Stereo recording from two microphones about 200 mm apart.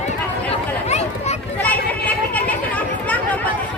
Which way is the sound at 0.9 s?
35° left (ahead or behind).